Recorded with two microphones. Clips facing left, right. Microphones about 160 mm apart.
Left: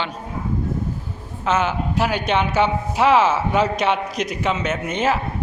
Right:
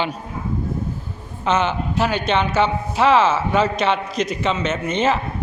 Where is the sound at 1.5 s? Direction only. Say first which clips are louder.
Right 1 dB; 5° left (ahead or behind).